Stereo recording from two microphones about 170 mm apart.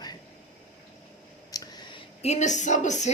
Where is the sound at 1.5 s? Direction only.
20° left (ahead or behind).